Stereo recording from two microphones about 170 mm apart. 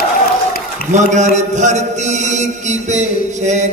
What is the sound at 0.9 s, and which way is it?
A man's voice, 45° right (ahead or behind).